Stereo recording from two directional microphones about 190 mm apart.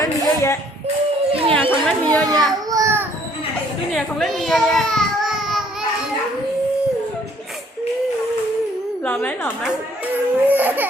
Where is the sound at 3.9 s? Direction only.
Centre (ahead or behind).